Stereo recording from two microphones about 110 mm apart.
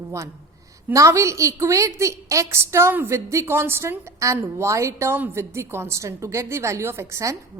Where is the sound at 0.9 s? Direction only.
30° right (ahead or behind).